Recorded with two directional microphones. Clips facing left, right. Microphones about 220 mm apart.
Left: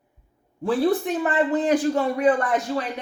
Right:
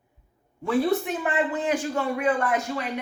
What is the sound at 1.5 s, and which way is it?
Speech, 40° left (ahead or behind).